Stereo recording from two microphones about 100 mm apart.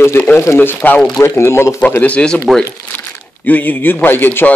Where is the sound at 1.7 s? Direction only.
15° left (ahead or behind).